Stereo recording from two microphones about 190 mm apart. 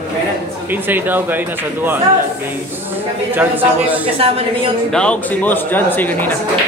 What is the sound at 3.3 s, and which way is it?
Speech, 10° right (ahead or behind).